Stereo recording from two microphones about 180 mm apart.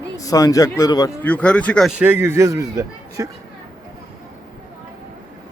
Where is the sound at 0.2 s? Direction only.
20° left (ahead or behind).